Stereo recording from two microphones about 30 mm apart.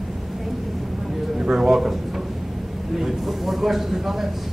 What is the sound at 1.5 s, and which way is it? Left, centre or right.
Speech, centre.